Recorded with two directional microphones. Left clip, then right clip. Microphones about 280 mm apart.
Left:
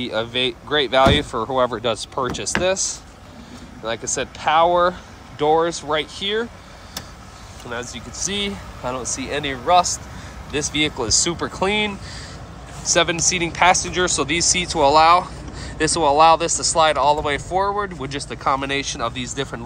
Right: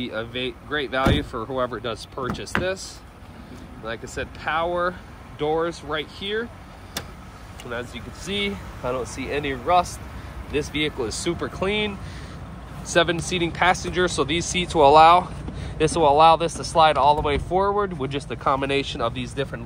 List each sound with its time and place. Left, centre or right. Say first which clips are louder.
0.0 s speech: left 7 dB; centre
2.5 s speech: left 5 dB; left
4.1 s speech: left 8 dB; centre
7.7 s speech: left 3 dB; centre